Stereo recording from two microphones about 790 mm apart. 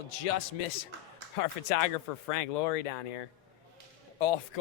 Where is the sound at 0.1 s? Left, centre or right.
Left.